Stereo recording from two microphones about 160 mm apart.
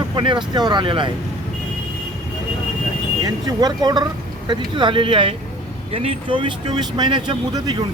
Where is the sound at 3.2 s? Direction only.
25° right (ahead or behind).